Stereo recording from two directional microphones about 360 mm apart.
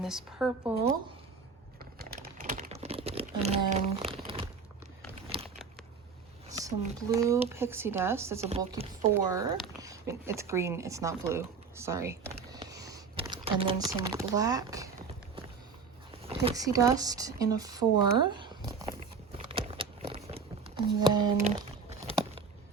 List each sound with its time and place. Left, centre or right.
0.0 s speech: centre
1.8 s typing: right
2.7 s crumpling: centre
6.5 s speech: centre
12.5 s computer keyboard: centre
16.2 s speech: centre
19.4 s a sound: centre